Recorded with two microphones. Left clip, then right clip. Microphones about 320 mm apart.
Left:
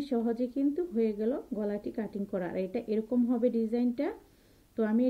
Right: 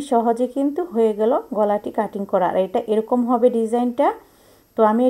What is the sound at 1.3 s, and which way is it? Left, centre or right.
Speech, right.